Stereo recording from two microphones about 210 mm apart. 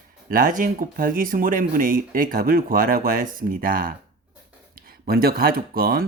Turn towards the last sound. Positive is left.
turn(degrees=-45)  # may be behind; listen again after turning